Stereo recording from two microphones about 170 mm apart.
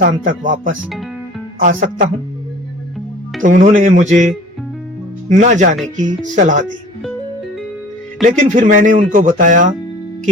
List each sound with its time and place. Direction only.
0.0 s speech: 50° right (ahead or behind)
0.8 s speech: centre (ahead or behind)
1.5 s speech: 50° right (ahead or behind)
3.4 s speech: 50° right (ahead or behind)
5.3 s speech: 50° right (ahead or behind)
8.2 s speech: 45° right (ahead or behind)